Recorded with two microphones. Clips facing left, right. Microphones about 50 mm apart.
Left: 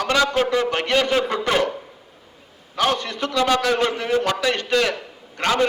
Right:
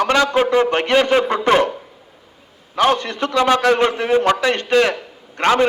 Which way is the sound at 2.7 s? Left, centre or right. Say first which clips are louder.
Right 5 dB; right.